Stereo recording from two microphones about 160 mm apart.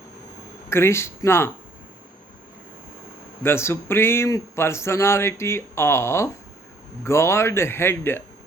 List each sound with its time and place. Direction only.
0.7 s a man's voice: 15° left (ahead or behind)
3.4 s a man's voice: 15° left (ahead or behind)